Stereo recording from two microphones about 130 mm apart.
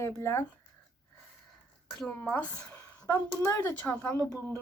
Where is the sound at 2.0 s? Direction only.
10° left (ahead or behind).